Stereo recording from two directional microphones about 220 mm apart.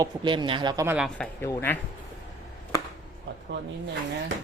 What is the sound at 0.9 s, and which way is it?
Speech, centre (ahead or behind).